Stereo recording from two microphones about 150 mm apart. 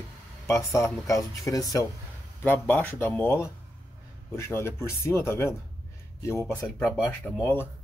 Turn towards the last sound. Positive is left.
turn(degrees=15)  # may be behind; listen again after turning